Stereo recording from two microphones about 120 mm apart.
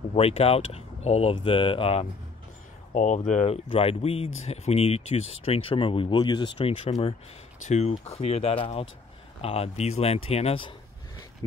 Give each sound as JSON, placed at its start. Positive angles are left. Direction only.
{"t": 0.1, "sound": "speech", "side_deg": 55}
{"t": 1.3, "sound": "speech", "side_deg": 45}
{"t": 2.9, "sound": "speech", "side_deg": 90}
{"t": 3.4, "sound": "speech", "side_deg": 50}
{"t": 6.8, "sound": "speech", "side_deg": 60}